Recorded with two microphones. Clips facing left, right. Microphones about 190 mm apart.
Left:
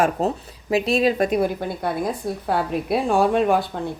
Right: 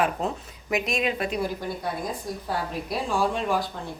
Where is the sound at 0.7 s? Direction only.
30° left (ahead or behind).